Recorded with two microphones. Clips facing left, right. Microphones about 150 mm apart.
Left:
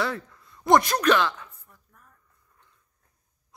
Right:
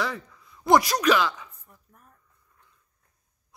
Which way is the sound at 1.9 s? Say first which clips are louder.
Right 2 dB; 25° right (ahead or behind).